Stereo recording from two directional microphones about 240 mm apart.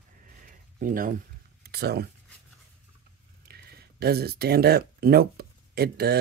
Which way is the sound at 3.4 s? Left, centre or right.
Right.